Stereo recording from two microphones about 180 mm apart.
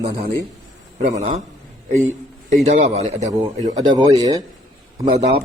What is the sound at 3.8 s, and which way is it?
Speech, 25° right (ahead or behind).